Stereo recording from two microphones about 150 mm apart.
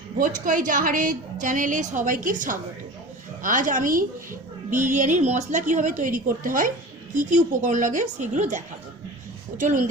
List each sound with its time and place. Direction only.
0.2 s a woman's voice: 60° right (ahead or behind)